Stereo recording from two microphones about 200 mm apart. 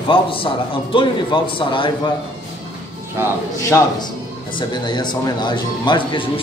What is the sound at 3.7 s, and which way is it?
A man's voice, 15° left (ahead or behind).